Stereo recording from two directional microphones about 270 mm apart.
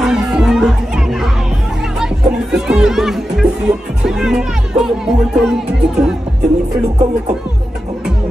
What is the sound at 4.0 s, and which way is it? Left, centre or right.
Speech, centre.